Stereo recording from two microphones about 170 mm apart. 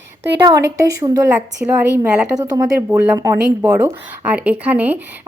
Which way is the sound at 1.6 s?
10° right (ahead or behind).